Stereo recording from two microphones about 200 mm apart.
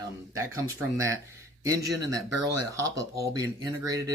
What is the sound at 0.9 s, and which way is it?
Speech, 15° right (ahead or behind).